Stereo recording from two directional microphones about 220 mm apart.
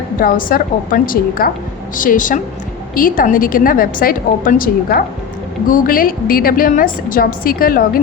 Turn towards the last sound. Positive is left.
turn(degrees=40)  # may be behind; listen again after turning